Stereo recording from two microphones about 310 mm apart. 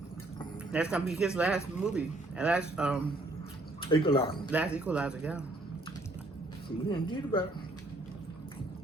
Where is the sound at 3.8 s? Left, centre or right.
Centre.